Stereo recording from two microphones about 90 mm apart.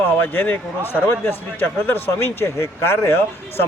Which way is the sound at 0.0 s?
25° left (ahead or behind).